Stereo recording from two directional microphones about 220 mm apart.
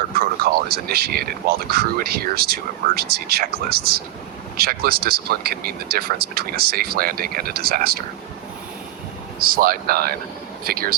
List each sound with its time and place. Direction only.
0.2 s speech: 45° right (ahead or behind)
9.4 s speech: 40° right (ahead or behind)